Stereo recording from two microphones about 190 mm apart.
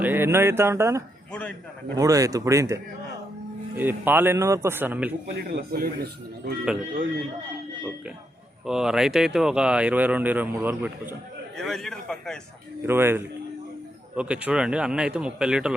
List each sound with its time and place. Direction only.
0.0 s speech: 10° right (ahead or behind)
1.3 s speech: 5° left (ahead or behind)
2.0 s speech: 20° right (ahead or behind)
5.3 s speech: 55° right (ahead or behind)
8.6 s speech: 5° right (ahead or behind)
11.5 s speech: centre (ahead or behind)
12.8 s speech: 10° right (ahead or behind)